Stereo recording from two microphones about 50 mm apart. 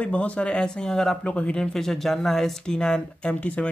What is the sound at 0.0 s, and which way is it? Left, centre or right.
Speech, left.